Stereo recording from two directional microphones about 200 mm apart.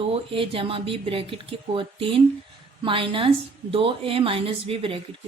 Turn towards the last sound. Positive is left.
turn(degrees=-25)  # may be behind; listen again after turning